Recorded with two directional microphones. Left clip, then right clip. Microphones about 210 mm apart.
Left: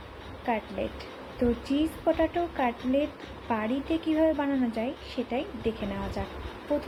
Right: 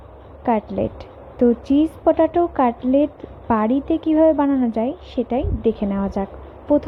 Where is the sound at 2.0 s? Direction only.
30° right (ahead or behind).